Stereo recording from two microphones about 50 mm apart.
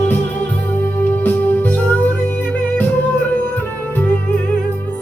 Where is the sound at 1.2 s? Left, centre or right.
Left.